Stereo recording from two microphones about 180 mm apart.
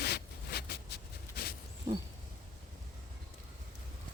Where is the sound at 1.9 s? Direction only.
20° right (ahead or behind).